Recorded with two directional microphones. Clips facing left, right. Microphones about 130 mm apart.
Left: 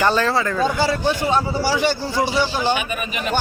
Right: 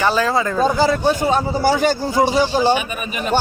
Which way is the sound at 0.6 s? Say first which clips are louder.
Right 5 dB; 40° right (ahead or behind).